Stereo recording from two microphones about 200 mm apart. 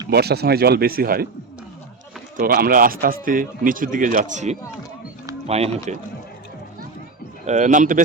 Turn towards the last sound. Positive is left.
turn(degrees=-40)  # may be behind; listen again after turning